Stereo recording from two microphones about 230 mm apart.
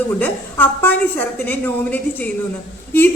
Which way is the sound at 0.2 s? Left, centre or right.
Centre.